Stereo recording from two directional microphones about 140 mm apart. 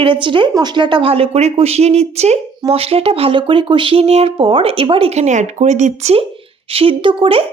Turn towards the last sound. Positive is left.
turn(degrees=-40)  # may be behind; listen again after turning